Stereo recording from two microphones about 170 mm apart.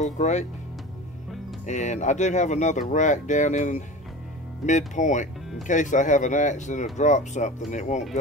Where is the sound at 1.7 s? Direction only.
45° left (ahead or behind).